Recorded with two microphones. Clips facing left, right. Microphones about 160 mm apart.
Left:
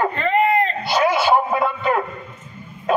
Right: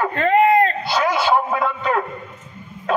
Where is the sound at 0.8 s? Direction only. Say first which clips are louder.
Left 2 dB; 10° left (ahead or behind).